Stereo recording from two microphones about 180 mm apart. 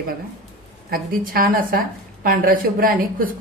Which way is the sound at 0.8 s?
55° right (ahead or behind).